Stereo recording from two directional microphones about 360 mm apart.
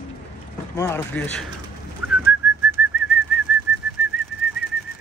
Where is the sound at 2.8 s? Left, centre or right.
Centre.